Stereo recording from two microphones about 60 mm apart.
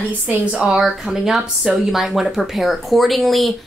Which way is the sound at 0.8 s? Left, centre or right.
Centre.